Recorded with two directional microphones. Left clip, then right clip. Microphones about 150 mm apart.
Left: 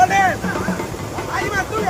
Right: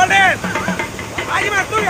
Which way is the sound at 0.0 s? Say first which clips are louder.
Right 3 dB; 25° right (ahead or behind).